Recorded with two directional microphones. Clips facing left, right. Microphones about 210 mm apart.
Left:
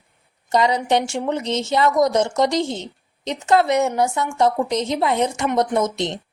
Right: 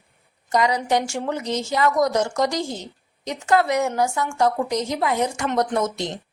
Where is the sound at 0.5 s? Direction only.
25° left (ahead or behind).